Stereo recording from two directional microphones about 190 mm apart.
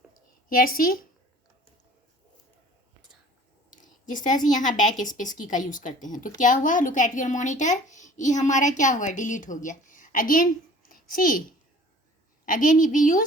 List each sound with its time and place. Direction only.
0.4 s a woman's voice: 50° left (ahead or behind)
3.7 s a woman's voice: 45° left (ahead or behind)
12.5 s a woman's voice: 45° left (ahead or behind)